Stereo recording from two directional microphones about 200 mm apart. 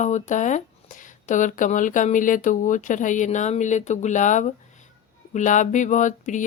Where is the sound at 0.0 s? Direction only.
35° left (ahead or behind).